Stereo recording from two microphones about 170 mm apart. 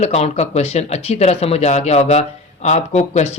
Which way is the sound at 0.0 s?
40° left (ahead or behind).